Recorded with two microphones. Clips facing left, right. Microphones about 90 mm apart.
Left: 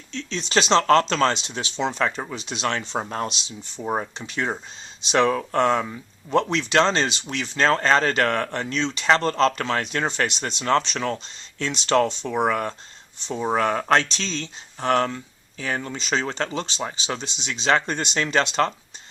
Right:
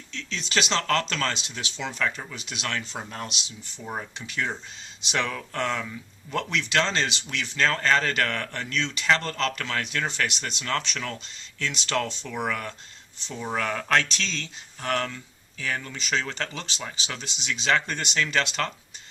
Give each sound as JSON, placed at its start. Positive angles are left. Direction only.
{"t": 0.1, "sound": "speech", "side_deg": 25}
{"t": 3.0, "sound": "speech", "side_deg": 40}